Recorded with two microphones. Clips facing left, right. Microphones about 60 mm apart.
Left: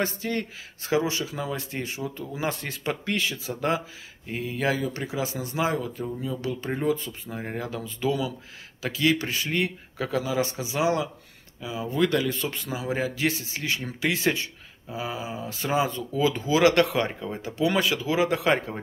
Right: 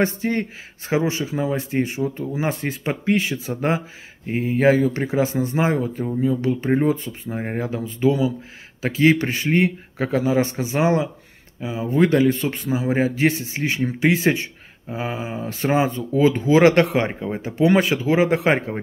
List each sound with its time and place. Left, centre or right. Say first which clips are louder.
0.0 s speech: right 7 dB; right
14.9 s speech: right 5 dB; right